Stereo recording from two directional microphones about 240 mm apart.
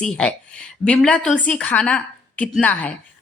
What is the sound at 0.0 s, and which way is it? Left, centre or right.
A woman's voice, centre.